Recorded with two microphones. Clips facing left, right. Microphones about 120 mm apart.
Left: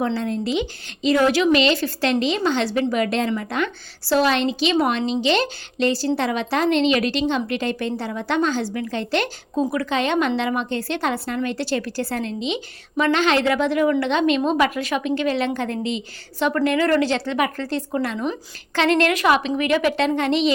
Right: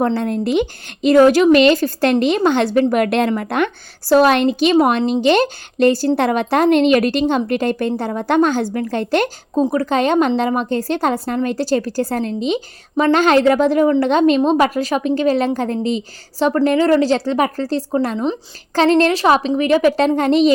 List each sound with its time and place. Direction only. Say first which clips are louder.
0.0 s a woman's voice: right 5 dB; 50° right (ahead or behind)